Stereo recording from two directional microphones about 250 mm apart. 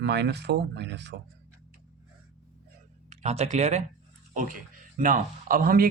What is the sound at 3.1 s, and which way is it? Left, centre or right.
Speech, right.